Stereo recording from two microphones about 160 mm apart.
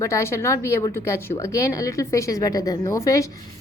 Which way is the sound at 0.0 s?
20° left (ahead or behind).